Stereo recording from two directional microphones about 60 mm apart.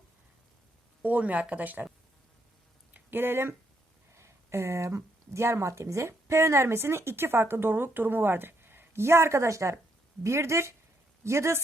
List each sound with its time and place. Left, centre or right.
1.0 s speech: right
2.9 s a sound: right
4.1 s speech: right